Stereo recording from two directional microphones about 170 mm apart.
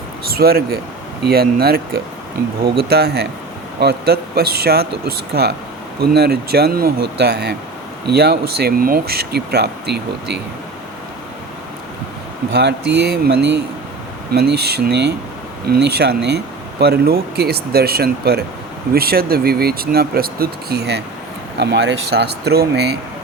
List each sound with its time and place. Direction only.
0.3 s speech: 65° right (ahead or behind)
12.5 s speech: 80° right
14.3 s speech: 70° right (ahead or behind)
22.4 s speech: 70° right (ahead or behind)